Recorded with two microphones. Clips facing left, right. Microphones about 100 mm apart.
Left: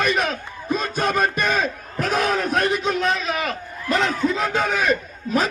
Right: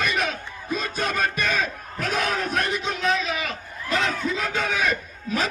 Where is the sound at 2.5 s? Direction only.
50° left (ahead or behind).